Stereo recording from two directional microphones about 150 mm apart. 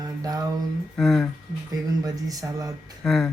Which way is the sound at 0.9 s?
Centre (ahead or behind).